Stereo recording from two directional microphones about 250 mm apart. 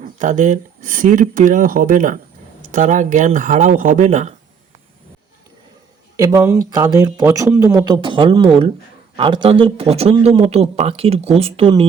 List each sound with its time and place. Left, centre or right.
0.0 s a man's voice: right
6.1 s a man's voice: centre